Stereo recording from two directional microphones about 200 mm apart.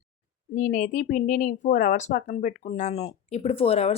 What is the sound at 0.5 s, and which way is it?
Speech, 40° left (ahead or behind).